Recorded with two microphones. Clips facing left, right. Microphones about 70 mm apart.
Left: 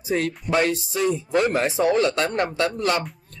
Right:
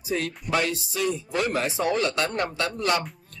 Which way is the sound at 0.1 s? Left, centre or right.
Left.